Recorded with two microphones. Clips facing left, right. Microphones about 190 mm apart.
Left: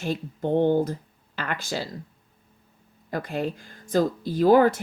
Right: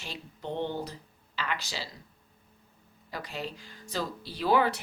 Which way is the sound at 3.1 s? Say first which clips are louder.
Left 9 dB; 50° left (ahead or behind).